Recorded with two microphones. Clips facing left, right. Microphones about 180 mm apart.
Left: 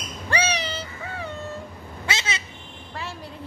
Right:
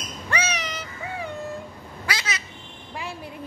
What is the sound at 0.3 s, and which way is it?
Cat, 30° left (ahead or behind).